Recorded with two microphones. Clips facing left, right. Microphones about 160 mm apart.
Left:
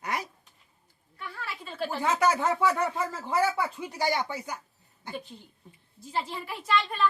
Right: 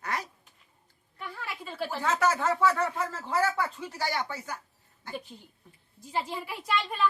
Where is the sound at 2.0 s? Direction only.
15° left (ahead or behind).